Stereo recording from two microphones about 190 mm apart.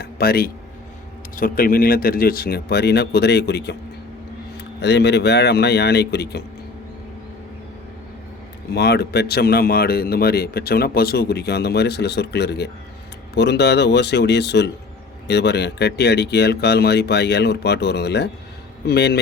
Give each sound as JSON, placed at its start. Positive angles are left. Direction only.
{"t": 0.0, "sound": "a man's voice", "side_deg": 55}
{"t": 8.7, "sound": "a man's voice", "side_deg": 60}